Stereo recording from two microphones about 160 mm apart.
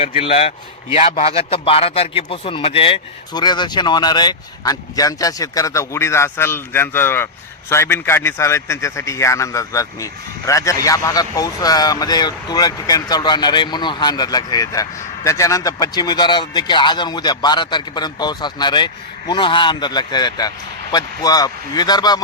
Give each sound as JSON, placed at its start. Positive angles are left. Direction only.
{"t": 0.0, "sound": "a man's voice", "side_deg": 35}